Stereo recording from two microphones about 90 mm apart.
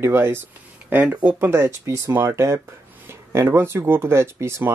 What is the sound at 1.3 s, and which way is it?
Speech, 30° right (ahead or behind).